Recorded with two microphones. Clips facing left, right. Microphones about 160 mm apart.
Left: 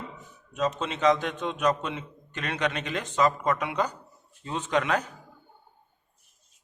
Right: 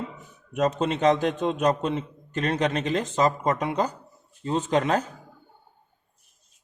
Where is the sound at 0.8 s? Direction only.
45° right (ahead or behind).